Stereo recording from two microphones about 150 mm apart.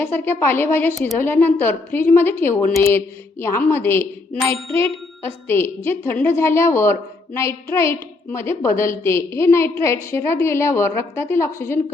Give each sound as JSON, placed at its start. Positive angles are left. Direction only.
{"t": 0.0, "sound": "a woman's voice", "side_deg": 15}
{"t": 0.9, "sound": "speech", "side_deg": 0}
{"t": 1.2, "sound": "a woman's voice", "side_deg": 15}